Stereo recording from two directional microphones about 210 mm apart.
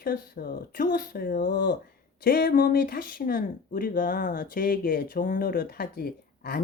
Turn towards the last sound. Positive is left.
turn(degrees=45)  # may be behind; listen again after turning